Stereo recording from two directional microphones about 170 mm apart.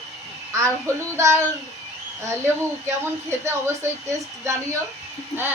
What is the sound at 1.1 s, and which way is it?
A woman's voice, 15° right (ahead or behind).